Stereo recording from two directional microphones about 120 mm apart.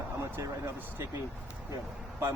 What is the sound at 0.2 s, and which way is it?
Speech, 25° right (ahead or behind).